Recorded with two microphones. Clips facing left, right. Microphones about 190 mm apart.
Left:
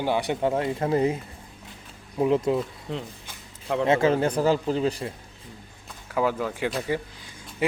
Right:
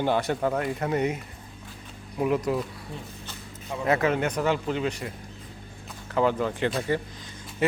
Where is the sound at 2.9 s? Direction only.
80° left.